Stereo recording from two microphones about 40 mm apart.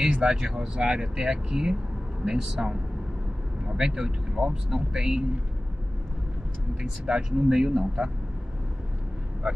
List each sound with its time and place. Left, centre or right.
0.0 s speech: right
2.5 s speech: right
6.8 s speech: centre